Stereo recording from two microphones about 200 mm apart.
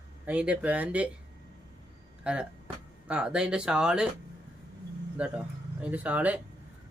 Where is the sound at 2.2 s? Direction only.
5° right (ahead or behind).